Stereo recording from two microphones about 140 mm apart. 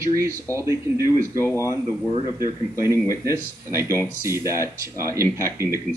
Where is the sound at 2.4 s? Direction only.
20° right (ahead or behind).